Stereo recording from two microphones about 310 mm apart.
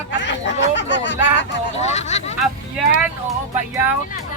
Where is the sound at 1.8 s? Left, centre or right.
Left.